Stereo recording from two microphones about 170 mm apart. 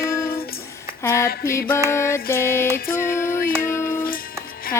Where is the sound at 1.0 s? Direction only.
15° left (ahead or behind).